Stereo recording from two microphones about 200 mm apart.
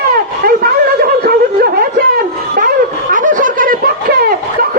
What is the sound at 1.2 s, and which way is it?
Snicker, 50° right (ahead or behind).